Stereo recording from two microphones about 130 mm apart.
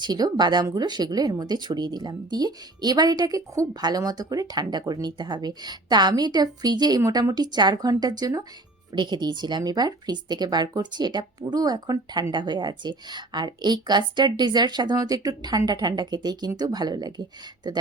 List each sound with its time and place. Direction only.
0.0 s speech: 30° right (ahead or behind)